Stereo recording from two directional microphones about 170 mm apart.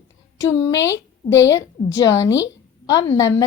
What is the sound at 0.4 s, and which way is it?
A woman's voice, 15° left (ahead or behind).